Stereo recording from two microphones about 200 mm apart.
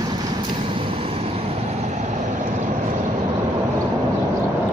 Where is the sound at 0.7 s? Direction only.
30° right (ahead or behind).